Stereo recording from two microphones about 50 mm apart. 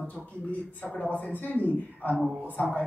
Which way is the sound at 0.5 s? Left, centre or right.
Left.